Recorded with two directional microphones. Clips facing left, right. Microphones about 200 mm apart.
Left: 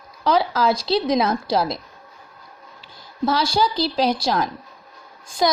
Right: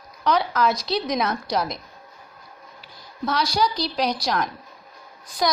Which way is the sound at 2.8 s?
30° left (ahead or behind).